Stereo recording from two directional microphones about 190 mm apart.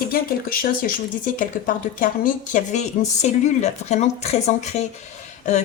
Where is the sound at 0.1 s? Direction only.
50° left (ahead or behind).